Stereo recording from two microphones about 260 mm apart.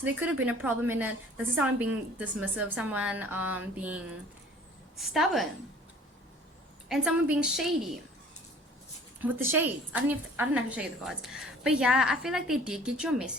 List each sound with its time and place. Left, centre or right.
0.0 s a woman's voice: centre
6.8 s a woman's voice: centre
9.2 s a woman's voice: centre